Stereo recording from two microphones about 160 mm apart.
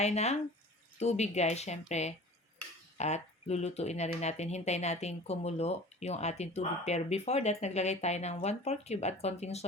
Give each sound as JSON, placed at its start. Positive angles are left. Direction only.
{"t": 0.0, "sound": "speech", "side_deg": 45}